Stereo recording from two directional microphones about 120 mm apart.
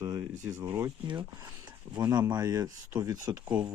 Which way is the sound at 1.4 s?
35° right (ahead or behind).